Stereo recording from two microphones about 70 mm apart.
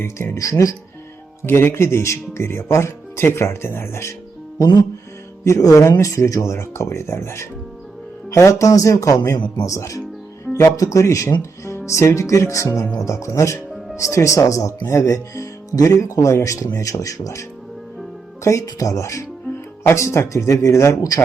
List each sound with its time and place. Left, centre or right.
0.3 s speech: left
1.5 s speech: left
4.5 s speech: left
18.4 s speech: left